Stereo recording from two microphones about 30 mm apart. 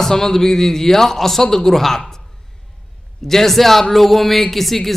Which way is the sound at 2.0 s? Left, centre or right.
Centre.